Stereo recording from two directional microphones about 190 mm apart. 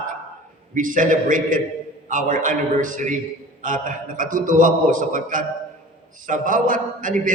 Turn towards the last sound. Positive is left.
turn(degrees=-45)  # may be behind; listen again after turning